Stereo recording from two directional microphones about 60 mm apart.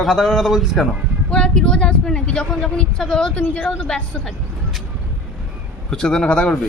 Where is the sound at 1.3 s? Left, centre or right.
Centre.